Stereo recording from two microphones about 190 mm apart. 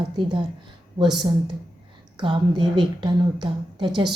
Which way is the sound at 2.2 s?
25° right (ahead or behind).